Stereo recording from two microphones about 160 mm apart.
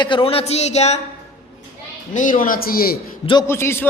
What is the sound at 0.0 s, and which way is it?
Speech, 30° left (ahead or behind).